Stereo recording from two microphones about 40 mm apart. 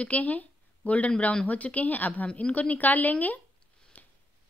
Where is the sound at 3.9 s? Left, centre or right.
Left.